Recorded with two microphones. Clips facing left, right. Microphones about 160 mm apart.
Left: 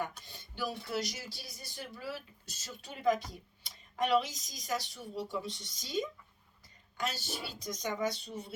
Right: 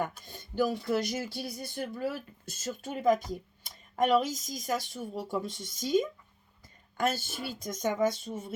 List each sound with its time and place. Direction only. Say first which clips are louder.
0.3 s speech: right 10 dB; 45° right (ahead or behind)